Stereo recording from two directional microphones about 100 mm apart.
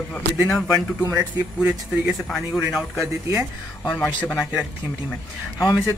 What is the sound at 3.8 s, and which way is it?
Speech, 15° left (ahead or behind).